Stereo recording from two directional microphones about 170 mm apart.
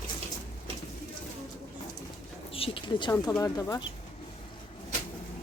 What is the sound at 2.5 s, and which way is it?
Speech, 30° left (ahead or behind).